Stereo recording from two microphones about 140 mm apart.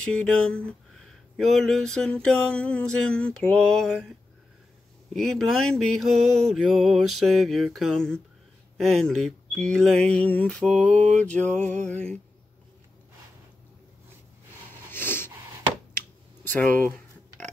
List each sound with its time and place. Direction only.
0.0 s speech: 5° left (ahead or behind)
5.1 s speech: 5° left (ahead or behind)
14.9 s wheeze: 15° left (ahead or behind)
16.5 s a sound: 10° left (ahead or behind)